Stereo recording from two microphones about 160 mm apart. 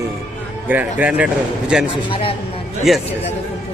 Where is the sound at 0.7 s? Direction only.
10° right (ahead or behind).